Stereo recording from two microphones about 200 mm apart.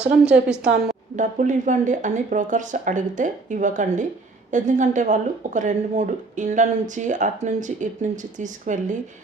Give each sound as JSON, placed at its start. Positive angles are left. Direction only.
{"t": 0.0, "sound": "a woman's voice", "side_deg": -5}
{"t": 0.7, "sound": "a woman's voice", "side_deg": -55}
{"t": 1.1, "sound": "speech", "side_deg": -40}